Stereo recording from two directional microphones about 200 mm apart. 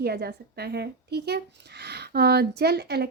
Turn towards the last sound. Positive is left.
turn(degrees=-55)  # may be behind; listen again after turning